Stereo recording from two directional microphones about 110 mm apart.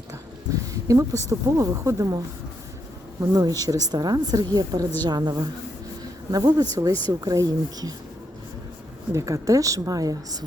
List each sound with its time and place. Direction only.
0.7 s a woman's voice: 30° right (ahead or behind)
9.1 s a woman's voice: 30° right (ahead or behind)